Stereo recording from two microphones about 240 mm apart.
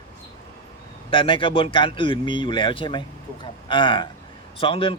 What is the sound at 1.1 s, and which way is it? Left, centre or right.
Speech, left.